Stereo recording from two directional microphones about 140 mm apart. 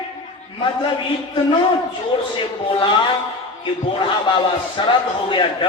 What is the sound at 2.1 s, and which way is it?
A man's voice, 35° left (ahead or behind).